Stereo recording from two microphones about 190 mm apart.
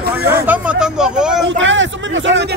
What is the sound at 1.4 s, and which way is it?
Speech, 75° right (ahead or behind).